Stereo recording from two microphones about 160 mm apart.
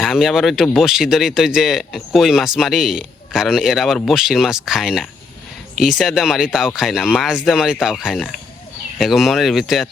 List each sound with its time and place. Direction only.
0.0 s speech: centre (ahead or behind)